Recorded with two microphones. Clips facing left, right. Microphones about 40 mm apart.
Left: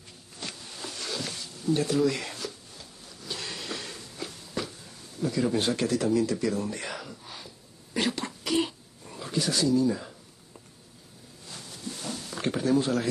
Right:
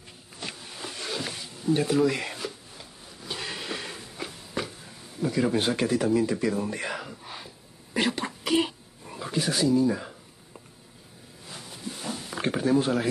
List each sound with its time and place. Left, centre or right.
0.4 s a sound: centre
5.2 s speech: centre
6.5 s speech: centre
7.1 s whispering: right
7.9 s throat clearing: centre
11.4 s a sound: centre